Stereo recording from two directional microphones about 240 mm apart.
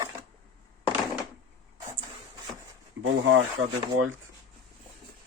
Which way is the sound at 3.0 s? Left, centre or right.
Right.